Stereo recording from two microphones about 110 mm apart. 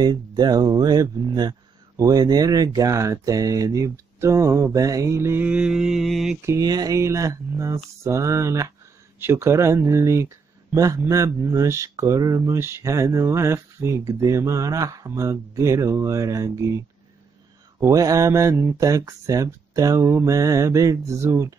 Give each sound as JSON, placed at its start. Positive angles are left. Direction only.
{"t": 0.0, "sound": "speech", "side_deg": -35}
{"t": 6.4, "sound": "speech", "side_deg": -30}